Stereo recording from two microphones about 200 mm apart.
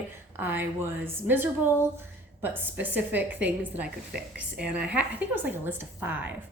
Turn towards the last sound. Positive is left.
turn(degrees=-10)  # may be behind; listen again after turning